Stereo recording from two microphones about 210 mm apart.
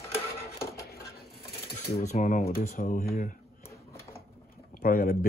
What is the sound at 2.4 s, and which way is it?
Speech, 45° left (ahead or behind).